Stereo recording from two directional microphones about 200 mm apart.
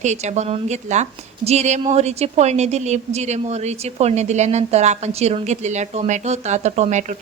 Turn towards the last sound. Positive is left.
turn(degrees=-35)  # may be behind; listen again after turning